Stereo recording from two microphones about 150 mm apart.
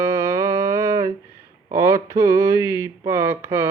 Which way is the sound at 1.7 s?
20° right (ahead or behind).